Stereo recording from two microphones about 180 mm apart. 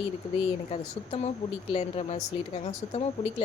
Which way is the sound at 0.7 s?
35° left (ahead or behind).